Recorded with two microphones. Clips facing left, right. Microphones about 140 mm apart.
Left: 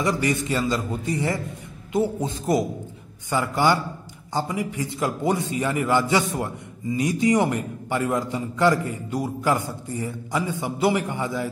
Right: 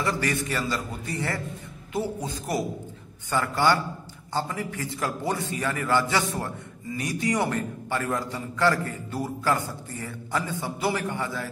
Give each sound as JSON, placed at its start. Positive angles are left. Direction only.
{"t": 0.0, "sound": "a man's voice", "side_deg": 20}